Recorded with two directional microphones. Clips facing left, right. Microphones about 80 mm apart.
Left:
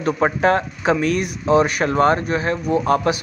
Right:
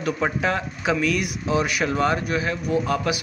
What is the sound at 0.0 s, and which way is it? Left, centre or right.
Speech, left.